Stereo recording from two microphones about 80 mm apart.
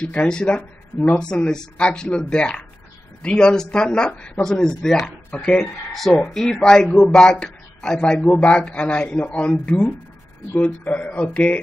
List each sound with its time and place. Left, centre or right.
0.0 s a man's voice: centre
1.2 s a man's voice: centre